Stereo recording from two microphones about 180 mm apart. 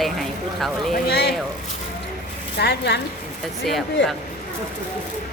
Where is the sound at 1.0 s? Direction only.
65° left (ahead or behind).